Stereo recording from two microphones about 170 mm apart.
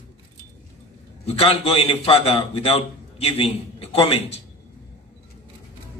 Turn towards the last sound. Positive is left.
turn(degrees=35)  # may be behind; listen again after turning